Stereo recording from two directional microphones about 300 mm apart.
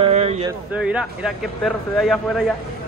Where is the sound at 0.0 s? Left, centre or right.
Right.